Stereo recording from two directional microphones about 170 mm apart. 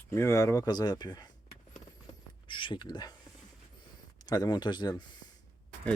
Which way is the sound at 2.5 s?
30° left (ahead or behind).